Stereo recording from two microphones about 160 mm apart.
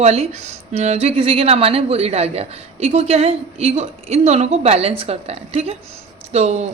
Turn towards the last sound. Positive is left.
turn(degrees=-40)  # may be behind; listen again after turning